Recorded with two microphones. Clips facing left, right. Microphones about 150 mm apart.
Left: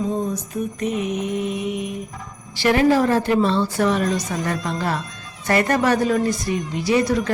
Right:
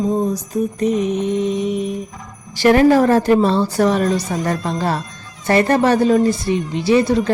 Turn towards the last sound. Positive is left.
turn(degrees=-30)  # may be behind; listen again after turning